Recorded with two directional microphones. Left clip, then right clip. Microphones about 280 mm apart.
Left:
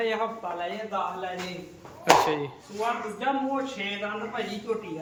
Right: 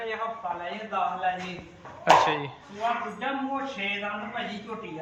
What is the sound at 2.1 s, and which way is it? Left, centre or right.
Speech, centre.